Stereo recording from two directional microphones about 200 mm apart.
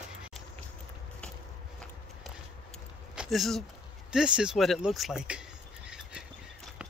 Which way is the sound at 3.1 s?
Centre (ahead or behind).